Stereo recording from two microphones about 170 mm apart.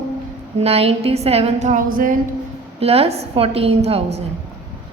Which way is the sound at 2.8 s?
35° right (ahead or behind).